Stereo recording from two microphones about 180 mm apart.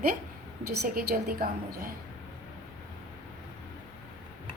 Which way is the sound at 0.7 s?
60° right (ahead or behind).